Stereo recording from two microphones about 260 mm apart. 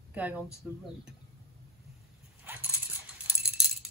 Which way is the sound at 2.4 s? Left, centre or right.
Centre.